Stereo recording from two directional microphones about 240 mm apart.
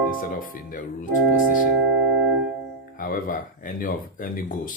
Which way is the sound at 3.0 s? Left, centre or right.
Left.